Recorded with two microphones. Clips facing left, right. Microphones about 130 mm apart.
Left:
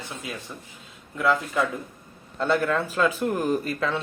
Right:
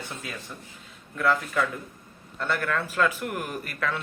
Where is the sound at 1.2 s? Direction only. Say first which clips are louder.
Left 2 dB; 20° left (ahead or behind).